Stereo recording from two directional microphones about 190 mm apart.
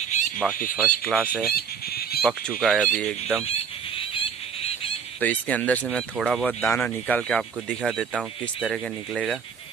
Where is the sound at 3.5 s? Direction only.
30° left (ahead or behind).